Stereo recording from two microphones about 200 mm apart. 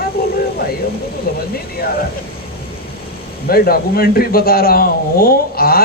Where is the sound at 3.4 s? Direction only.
50° left (ahead or behind).